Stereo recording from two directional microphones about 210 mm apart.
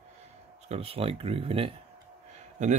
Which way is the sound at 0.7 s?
30° right (ahead or behind).